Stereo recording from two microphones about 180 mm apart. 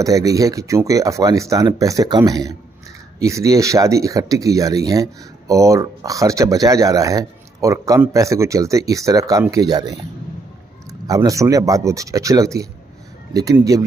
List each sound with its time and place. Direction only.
0.0 s speech: 20° right (ahead or behind)